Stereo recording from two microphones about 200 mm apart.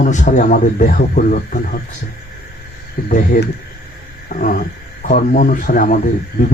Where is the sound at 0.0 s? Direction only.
35° left (ahead or behind).